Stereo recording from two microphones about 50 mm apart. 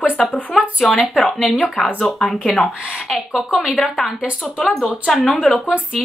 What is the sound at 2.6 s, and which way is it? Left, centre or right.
Speech, centre.